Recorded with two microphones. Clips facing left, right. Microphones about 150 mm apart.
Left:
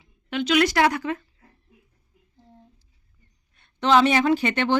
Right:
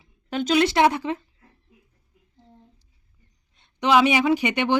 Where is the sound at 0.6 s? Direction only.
25° right (ahead or behind).